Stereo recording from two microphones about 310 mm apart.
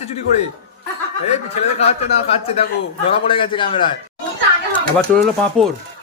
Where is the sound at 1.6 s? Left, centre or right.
Centre.